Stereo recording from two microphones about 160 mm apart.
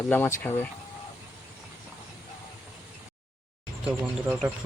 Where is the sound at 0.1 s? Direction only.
15° left (ahead or behind).